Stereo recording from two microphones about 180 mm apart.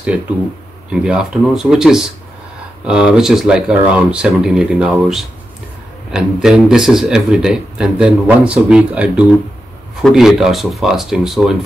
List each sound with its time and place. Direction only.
1.0 s a man's voice: 5° right (ahead or behind)